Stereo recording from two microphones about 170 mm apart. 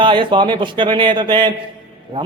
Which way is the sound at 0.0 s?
30° right (ahead or behind).